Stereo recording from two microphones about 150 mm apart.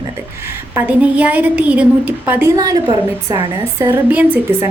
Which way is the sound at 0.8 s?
10° right (ahead or behind).